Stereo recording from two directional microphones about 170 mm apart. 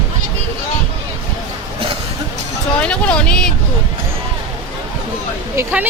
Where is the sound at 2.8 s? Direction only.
5° left (ahead or behind).